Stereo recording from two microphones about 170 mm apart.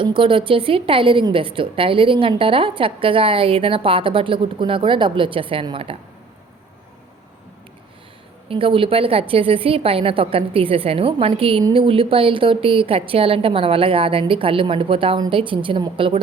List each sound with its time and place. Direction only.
0.0 s a woman's voice: 30° right (ahead or behind)
8.4 s a woman's voice: 30° right (ahead or behind)